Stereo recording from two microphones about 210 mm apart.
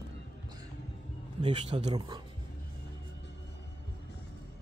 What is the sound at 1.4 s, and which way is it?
Speech, 25° right (ahead or behind).